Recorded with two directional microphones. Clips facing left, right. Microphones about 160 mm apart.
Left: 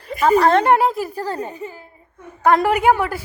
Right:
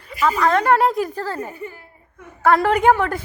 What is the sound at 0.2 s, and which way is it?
Speech, 35° left (ahead or behind).